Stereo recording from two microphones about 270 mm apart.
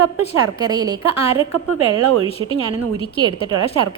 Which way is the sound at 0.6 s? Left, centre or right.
Centre.